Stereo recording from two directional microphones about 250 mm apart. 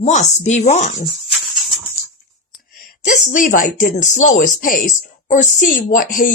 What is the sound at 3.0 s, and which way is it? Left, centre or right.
A woman's voice, left.